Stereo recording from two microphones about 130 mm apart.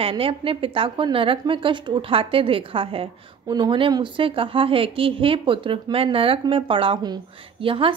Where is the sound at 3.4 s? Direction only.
30° right (ahead or behind).